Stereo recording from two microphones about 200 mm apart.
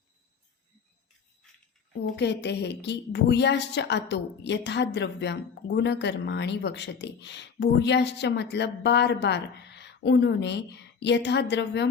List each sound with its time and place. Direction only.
2.1 s a woman's voice: 60° left (ahead or behind)